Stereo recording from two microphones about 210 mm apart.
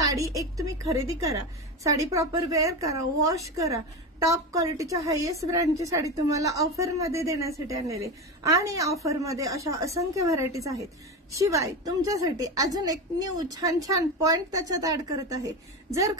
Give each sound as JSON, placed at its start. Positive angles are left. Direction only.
{"t": 0.1, "sound": "a woman's voice", "side_deg": -15}